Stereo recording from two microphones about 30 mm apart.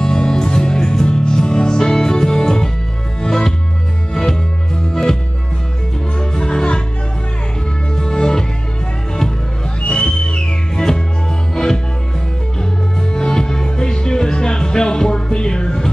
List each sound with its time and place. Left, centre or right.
0.0 s music: left
6.1 s music: left
7.9 s music: left
9.8 s music: left
11.5 s music: left
13.1 s music: left